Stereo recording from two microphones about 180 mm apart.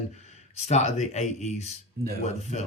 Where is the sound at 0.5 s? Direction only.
35° left (ahead or behind).